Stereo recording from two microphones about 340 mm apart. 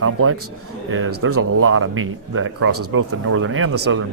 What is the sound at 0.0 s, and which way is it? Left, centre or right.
Speech, right.